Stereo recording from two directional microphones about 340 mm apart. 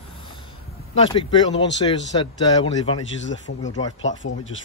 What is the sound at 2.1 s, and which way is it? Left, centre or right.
Speech, centre.